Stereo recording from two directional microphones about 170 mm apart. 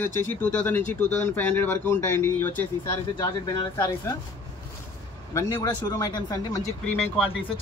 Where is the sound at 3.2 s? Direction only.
25° left (ahead or behind).